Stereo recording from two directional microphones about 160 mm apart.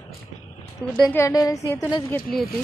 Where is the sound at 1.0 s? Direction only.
15° left (ahead or behind).